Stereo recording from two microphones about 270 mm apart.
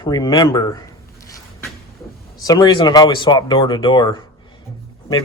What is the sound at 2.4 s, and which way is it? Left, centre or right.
Speech, centre.